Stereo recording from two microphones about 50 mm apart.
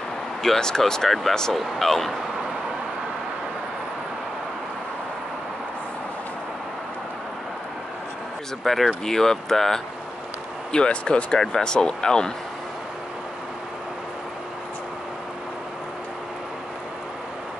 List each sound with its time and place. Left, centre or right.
0.4 s speech: centre
8.6 s speech: centre
10.7 s speech: centre
11.3 s speech: centre